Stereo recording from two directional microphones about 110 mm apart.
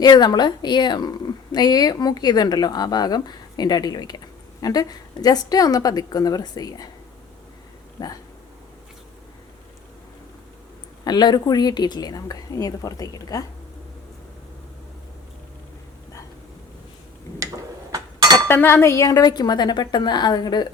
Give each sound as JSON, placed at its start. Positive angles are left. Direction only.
{"t": 0.0, "sound": "speech", "side_deg": 40}
{"t": 7.9, "sound": "speech", "side_deg": 35}
{"t": 11.0, "sound": "speech", "side_deg": 40}
{"t": 17.9, "sound": "chink", "side_deg": -40}
{"t": 18.4, "sound": "speech", "side_deg": 20}